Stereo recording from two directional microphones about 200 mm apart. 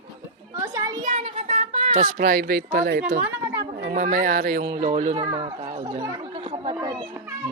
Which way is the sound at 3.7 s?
45° right (ahead or behind).